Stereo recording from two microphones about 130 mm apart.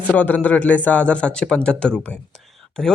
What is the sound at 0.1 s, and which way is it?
A man's voice, 10° left (ahead or behind).